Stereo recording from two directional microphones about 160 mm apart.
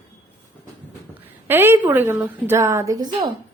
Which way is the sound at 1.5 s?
15° right (ahead or behind).